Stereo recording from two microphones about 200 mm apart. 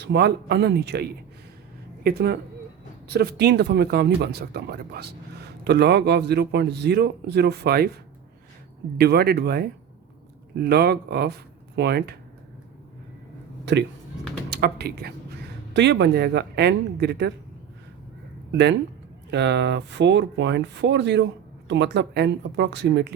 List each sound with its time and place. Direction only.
0.0 s a man's voice: 55° right (ahead or behind)
2.0 s a man's voice: 55° right (ahead or behind)
9.0 s speech: 50° right (ahead or behind)
14.5 s a man's voice: 55° right (ahead or behind)
19.3 s a man's voice: 60° right (ahead or behind)